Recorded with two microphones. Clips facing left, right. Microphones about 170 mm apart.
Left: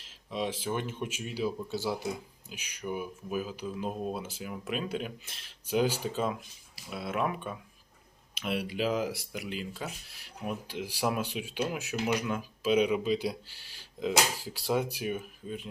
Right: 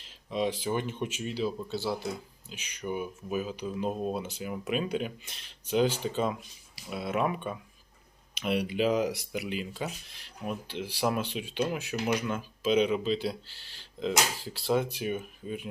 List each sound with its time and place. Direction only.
0.0 s speech: centre (ahead or behind)
10.2 s speech: 10° left (ahead or behind)